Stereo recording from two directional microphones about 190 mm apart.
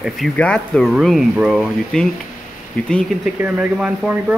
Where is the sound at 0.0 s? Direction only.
5° left (ahead or behind).